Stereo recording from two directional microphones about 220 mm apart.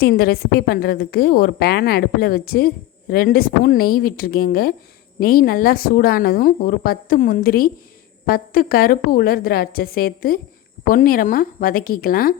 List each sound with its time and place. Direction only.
0.0 s a woman's voice: 45° left (ahead or behind)